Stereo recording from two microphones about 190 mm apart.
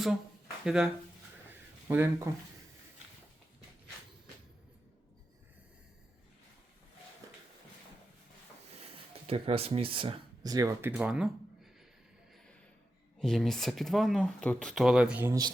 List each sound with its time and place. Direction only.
0.6 s speech: 5° right (ahead or behind)
1.5 s a sound: 10° right (ahead or behind)
8.6 s speech: 35° right (ahead or behind); by 11.7 s 5° right (ahead or behind)
13.1 s speech: centre (ahead or behind)